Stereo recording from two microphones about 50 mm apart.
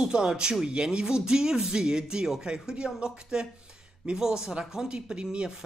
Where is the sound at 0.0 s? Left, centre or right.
Centre.